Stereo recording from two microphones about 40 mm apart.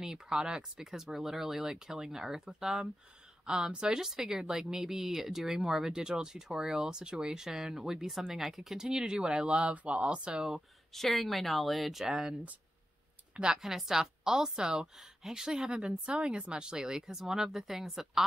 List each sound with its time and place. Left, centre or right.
0.0 s speech: centre
8.8 s speech: right
10.3 s speech: centre
10.9 s speech: centre
12.0 s speech: centre
13.6 s speech: centre